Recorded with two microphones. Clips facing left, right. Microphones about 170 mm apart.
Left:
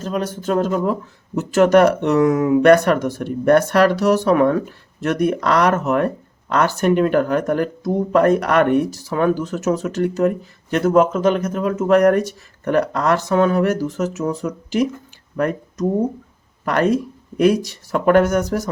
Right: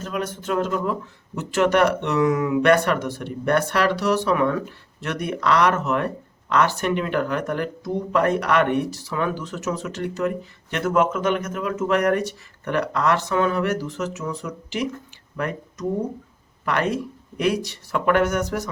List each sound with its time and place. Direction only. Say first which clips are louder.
0.0 s speech: left 5 dB; 35° left (ahead or behind)